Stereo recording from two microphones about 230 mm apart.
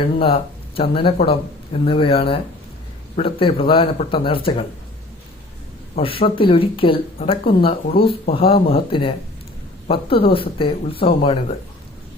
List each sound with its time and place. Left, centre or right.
0.0 s speech: left
6.0 s speech: left